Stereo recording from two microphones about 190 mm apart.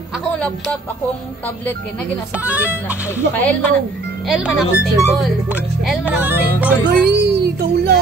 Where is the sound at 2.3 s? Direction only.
5° right (ahead or behind).